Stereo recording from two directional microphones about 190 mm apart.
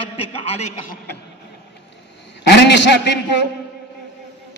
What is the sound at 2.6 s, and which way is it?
Speech, 65° left (ahead or behind).